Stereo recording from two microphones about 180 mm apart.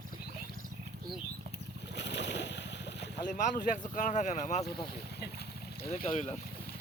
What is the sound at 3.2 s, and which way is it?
Speech, 45° left (ahead or behind).